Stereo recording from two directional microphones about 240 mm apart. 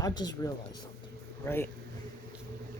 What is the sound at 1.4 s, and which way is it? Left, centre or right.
Speech, centre.